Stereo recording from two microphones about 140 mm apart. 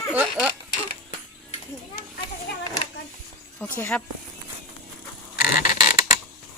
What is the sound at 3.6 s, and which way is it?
Speech, 10° left (ahead or behind).